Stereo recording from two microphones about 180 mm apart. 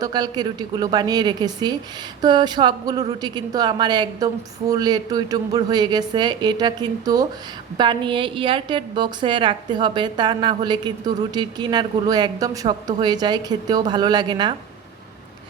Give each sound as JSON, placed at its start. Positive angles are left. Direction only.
{"t": 0.0, "sound": "a woman's voice", "side_deg": -25}